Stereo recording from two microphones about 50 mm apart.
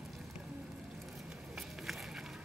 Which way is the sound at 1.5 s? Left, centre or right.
Centre.